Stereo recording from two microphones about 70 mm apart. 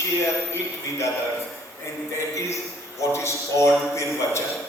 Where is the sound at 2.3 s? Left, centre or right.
Left.